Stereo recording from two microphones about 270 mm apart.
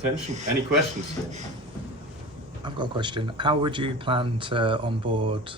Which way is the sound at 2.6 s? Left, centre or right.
Centre.